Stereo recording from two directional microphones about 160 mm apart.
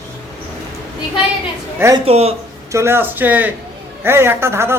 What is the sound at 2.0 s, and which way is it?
Speech, 40° right (ahead or behind).